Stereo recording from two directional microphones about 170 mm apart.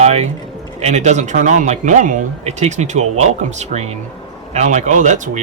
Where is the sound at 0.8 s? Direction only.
40° right (ahead or behind).